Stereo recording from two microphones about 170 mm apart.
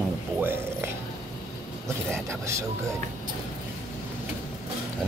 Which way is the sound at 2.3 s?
15° right (ahead or behind).